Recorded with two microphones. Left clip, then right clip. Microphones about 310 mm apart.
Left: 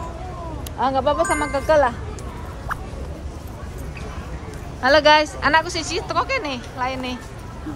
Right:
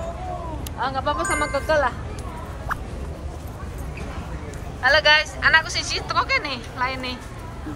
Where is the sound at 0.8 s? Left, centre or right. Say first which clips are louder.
Left 5 dB; left.